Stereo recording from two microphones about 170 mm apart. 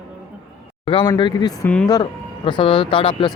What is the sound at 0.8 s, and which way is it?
Speech, 30° left (ahead or behind).